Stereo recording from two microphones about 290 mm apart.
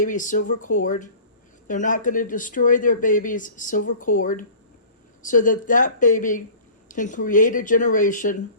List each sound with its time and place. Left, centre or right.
0.0 s speech: left